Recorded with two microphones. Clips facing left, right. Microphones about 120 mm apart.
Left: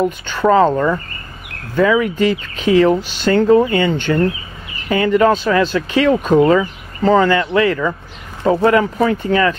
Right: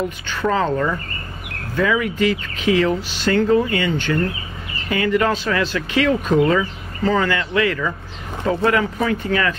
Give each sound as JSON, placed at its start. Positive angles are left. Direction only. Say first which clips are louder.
{"t": 0.3, "sound": "speech", "louder": "left 7 dB", "side_deg": 35}